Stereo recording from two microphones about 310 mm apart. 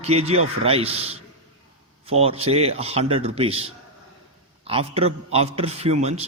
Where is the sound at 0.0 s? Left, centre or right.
Centre.